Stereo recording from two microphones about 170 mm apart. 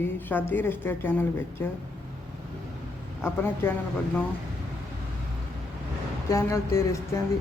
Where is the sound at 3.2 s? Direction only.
15° left (ahead or behind).